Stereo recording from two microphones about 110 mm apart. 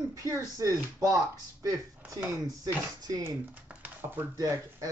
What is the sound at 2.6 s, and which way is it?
Speech, 35° right (ahead or behind).